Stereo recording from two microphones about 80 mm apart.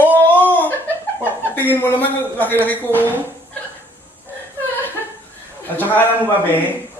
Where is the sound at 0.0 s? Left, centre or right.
Left.